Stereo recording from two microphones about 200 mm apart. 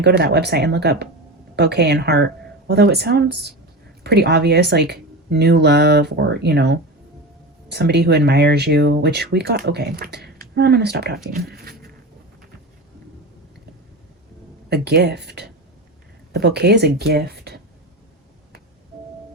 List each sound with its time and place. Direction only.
0.2 s speech: 55° right (ahead or behind)
11.3 s a sound: 45° right (ahead or behind)
14.7 s speech: 55° right (ahead or behind)